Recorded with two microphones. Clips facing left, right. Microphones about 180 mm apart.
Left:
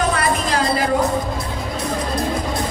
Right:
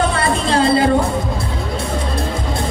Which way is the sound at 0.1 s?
30° right (ahead or behind).